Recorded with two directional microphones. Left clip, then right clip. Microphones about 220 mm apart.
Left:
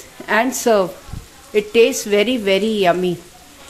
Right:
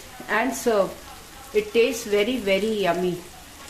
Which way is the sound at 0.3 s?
45° left (ahead or behind).